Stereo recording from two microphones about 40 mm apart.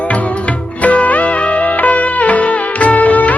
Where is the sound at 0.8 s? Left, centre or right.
Left.